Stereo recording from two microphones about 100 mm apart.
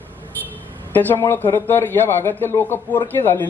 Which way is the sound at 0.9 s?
20° left (ahead or behind).